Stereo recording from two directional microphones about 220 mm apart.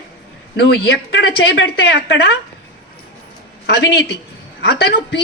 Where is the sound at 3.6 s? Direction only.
50° left (ahead or behind).